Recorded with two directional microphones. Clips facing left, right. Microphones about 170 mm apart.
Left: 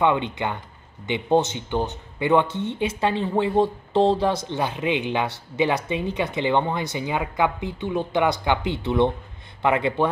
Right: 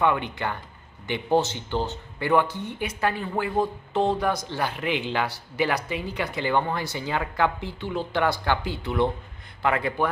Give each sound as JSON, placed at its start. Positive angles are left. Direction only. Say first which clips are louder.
{"t": 0.0, "sound": "speech", "louder": "left 3 dB", "side_deg": 20}